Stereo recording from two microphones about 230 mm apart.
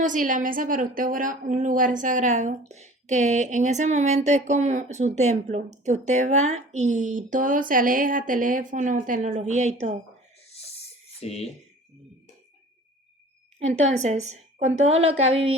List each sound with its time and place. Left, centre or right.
0.0 s a woman's voice: right
11.2 s speech: left
13.6 s a woman's voice: right